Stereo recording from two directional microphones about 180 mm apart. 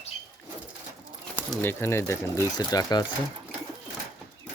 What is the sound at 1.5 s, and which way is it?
Speech, 15° left (ahead or behind).